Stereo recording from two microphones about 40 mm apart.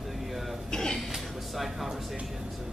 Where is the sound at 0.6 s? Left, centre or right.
Centre.